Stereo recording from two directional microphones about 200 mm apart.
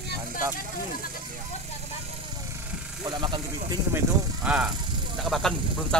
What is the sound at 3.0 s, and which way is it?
Speech, 20° right (ahead or behind).